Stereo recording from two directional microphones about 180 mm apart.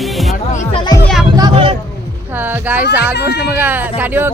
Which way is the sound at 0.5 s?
40° left (ahead or behind).